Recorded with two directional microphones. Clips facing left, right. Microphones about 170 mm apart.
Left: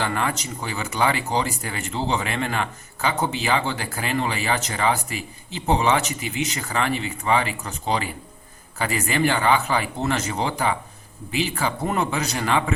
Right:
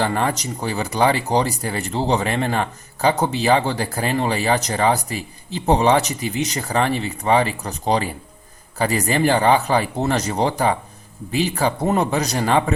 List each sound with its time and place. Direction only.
0.0 s speech: 35° right (ahead or behind)